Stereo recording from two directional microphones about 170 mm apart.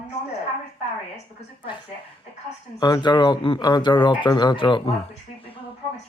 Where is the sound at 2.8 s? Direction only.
25° left (ahead or behind).